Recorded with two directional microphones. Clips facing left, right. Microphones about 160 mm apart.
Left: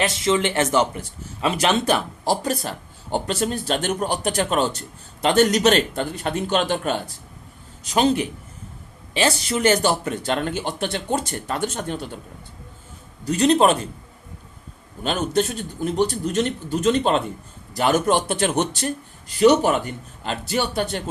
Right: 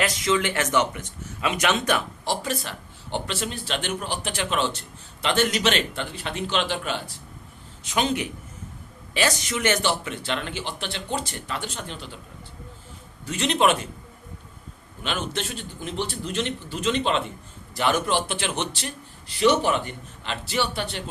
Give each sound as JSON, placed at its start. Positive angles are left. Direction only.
{"t": 0.0, "sound": "speech", "side_deg": 30}
{"t": 7.9, "sound": "speech", "side_deg": 35}
{"t": 13.2, "sound": "speech", "side_deg": 40}
{"t": 15.0, "sound": "speech", "side_deg": 40}